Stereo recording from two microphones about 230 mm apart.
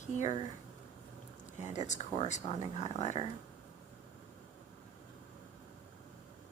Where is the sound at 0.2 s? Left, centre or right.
Left.